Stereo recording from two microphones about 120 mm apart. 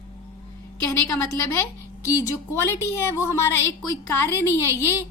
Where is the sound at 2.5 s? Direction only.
20° left (ahead or behind).